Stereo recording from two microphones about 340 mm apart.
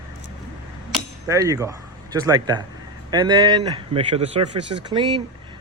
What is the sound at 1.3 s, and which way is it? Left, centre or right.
A man's voice, centre.